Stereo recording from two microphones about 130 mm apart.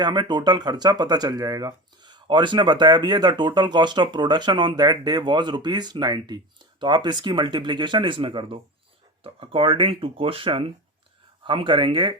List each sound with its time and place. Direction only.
0.0 s speech: 35° right (ahead or behind)